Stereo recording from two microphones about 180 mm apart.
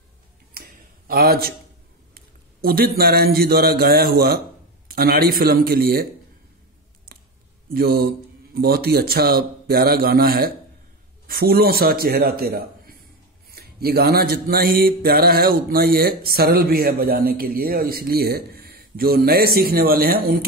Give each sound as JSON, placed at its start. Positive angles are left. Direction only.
{"t": 0.6, "sound": "a sound", "side_deg": -55}
{"t": 2.1, "sound": "a man's voice", "side_deg": -55}
{"t": 4.9, "sound": "music", "side_deg": -55}
{"t": 7.7, "sound": "music", "side_deg": -55}